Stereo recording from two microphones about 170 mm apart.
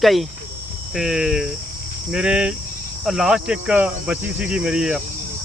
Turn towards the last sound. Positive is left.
turn(degrees=-5)  # may be behind; listen again after turning